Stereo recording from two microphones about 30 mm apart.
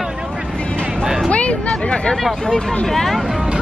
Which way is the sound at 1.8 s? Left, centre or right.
Left.